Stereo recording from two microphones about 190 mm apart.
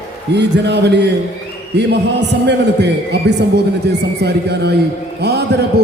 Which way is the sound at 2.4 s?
60° right (ahead or behind).